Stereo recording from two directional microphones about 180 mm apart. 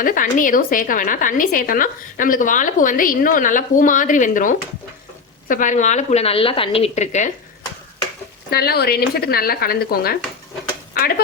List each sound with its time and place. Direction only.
0.0 s a woman's voice: 50° left (ahead or behind)
8.4 s speech: 60° left (ahead or behind)